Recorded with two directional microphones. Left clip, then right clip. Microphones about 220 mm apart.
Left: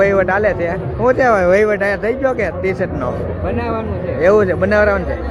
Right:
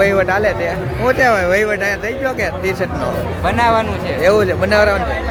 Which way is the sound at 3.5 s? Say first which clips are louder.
Right 10 dB; 25° right (ahead or behind).